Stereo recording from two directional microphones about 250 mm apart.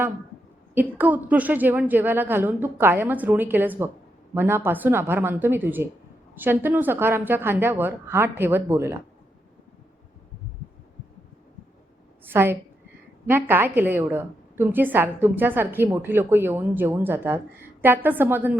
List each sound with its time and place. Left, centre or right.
0.7 s a woman's voice: centre
12.2 s a woman's voice: centre